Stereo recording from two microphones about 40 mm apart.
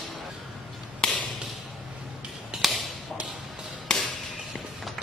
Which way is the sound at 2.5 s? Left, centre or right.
Centre.